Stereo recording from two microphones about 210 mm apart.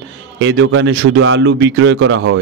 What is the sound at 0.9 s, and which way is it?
Speech, 45° right (ahead or behind).